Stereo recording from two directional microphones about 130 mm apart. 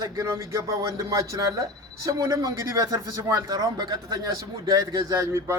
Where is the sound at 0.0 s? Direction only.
25° right (ahead or behind).